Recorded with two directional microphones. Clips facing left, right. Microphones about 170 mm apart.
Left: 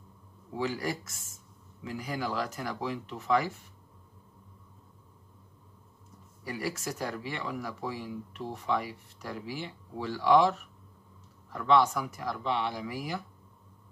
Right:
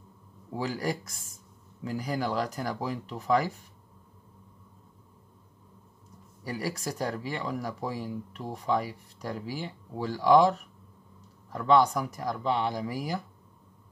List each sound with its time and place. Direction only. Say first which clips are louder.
0.6 s speech: right 1 dB; 35° right (ahead or behind)
6.4 s speech: right 2 dB; 35° right (ahead or behind)
11.5 s speech: right 2 dB; 35° right (ahead or behind)